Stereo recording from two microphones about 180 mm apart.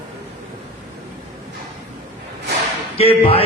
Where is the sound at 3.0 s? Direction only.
30° left (ahead or behind).